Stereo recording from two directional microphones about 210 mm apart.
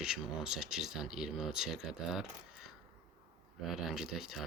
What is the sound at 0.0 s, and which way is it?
Speech, centre (ahead or behind).